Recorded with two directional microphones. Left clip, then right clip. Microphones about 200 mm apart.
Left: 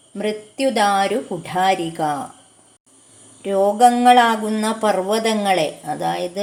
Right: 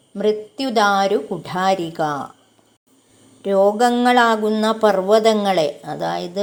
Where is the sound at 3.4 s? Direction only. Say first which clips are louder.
Left 1 dB; 20° right (ahead or behind).